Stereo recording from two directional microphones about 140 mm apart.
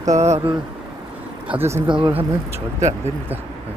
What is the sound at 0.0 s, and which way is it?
Speech, 55° right (ahead or behind).